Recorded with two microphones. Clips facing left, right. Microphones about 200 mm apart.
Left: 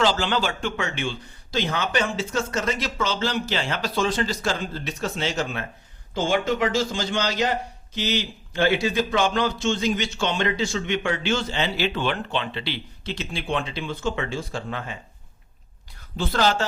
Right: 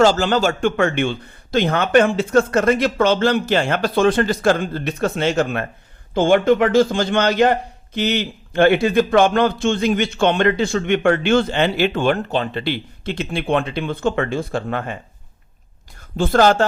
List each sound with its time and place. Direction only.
0.0 s a man's voice: 45° right (ahead or behind)
16.0 s speech: 50° right (ahead or behind)